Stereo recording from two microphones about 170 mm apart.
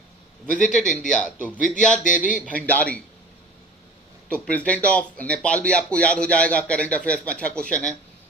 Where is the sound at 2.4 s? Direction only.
10° left (ahead or behind).